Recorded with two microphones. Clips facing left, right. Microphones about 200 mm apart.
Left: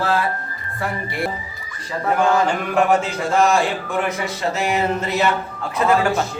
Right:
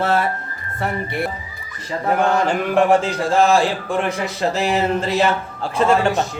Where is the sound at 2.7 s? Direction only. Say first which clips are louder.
Right 2 dB; 30° right (ahead or behind).